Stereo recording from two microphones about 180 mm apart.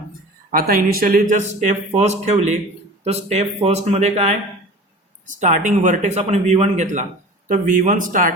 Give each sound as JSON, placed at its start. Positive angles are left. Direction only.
{"t": 0.5, "sound": "speech", "side_deg": -55}